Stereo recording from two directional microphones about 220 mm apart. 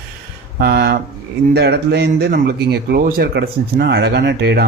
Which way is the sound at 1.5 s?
50° right (ahead or behind).